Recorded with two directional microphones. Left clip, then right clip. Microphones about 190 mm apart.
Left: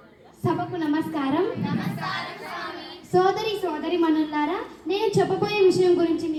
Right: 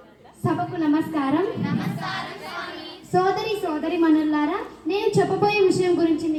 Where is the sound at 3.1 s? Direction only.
20° left (ahead or behind).